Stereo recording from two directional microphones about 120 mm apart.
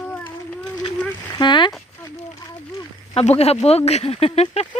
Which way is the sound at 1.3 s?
40° left (ahead or behind).